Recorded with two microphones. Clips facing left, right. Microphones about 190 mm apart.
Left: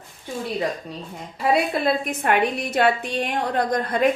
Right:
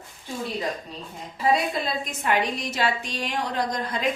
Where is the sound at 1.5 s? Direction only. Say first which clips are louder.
Left 5 dB; 60° left (ahead or behind).